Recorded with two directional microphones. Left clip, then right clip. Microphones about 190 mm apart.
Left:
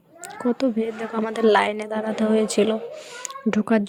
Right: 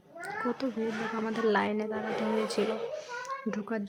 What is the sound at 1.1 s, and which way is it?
A woman's voice, 35° left (ahead or behind).